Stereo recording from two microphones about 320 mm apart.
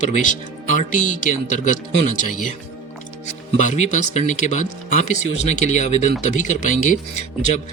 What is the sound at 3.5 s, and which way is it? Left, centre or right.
Speech, left.